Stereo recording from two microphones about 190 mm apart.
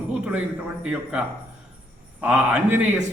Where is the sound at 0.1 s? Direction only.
5° right (ahead or behind).